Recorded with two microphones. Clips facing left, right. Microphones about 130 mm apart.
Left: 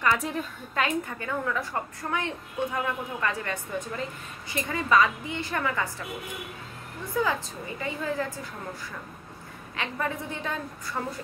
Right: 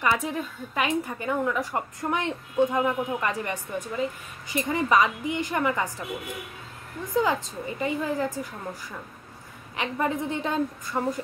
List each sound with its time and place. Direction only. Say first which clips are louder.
0.0 s a woman's voice: right 1 dB; 5° right (ahead or behind)
0.7 s a woman's voice: right 1 dB; 15° right (ahead or behind)
7.2 s a woman's voice: right 3 dB; 20° right (ahead or behind)
9.8 s a woman's voice: right 4 dB; 20° right (ahead or behind)